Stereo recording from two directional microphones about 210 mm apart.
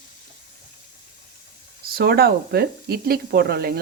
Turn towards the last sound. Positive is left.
turn(degrees=-50)  # may be behind; listen again after turning